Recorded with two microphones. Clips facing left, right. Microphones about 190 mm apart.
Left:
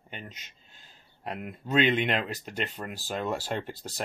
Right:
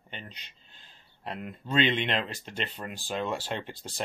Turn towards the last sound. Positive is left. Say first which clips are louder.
# left 1 dB
turn(degrees=5)  # may be behind; listen again after turning